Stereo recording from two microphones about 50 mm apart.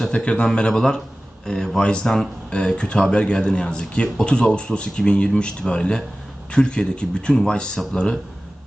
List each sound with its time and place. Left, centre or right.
0.1 s a man's voice: left